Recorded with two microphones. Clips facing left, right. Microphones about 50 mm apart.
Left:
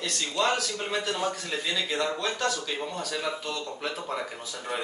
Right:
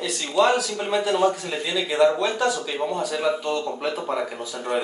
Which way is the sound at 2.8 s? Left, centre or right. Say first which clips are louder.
Right 7 dB; centre.